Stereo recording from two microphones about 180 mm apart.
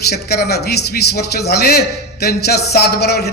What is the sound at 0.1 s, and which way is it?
A man's voice, 65° left (ahead or behind).